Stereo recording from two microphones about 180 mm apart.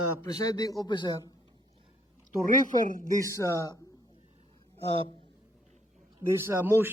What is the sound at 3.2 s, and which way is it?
Speech, 15° left (ahead or behind).